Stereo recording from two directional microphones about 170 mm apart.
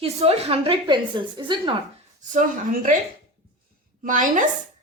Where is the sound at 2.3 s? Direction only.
50° right (ahead or behind).